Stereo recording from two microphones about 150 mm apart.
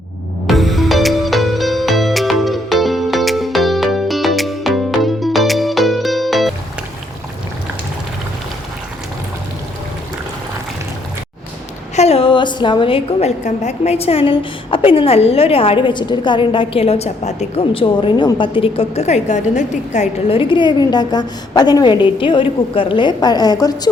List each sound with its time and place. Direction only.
0.4 s music: centre (ahead or behind)
11.9 s a woman's voice: 45° left (ahead or behind); by 23.9 s 25° left (ahead or behind)